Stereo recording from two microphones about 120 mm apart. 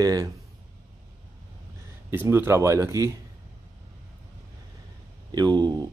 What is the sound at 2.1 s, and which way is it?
Speech, 20° right (ahead or behind).